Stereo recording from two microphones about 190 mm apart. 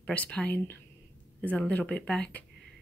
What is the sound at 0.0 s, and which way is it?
Speech, 5° left (ahead or behind).